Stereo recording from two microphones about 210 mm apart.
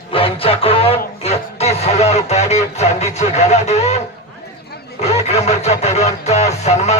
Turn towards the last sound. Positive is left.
turn(degrees=30)  # may be behind; listen again after turning